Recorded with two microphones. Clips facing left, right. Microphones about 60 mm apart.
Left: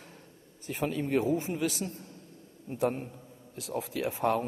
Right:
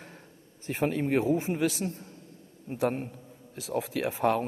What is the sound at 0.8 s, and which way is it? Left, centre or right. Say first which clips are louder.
A man's voice: right 2 dB; right.